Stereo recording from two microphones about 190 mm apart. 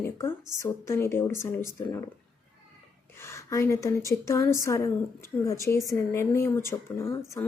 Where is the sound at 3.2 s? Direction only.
15° left (ahead or behind).